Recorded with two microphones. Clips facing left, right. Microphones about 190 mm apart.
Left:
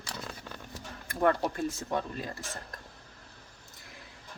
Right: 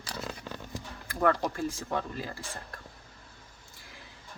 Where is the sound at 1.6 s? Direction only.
20° left (ahead or behind).